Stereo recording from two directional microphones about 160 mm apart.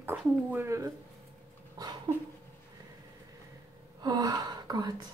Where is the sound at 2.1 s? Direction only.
30° right (ahead or behind).